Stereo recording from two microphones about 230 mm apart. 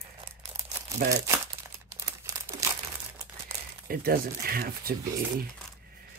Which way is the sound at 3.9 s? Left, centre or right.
Right.